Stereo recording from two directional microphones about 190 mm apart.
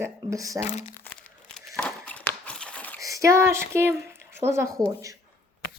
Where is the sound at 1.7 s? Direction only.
5° left (ahead or behind).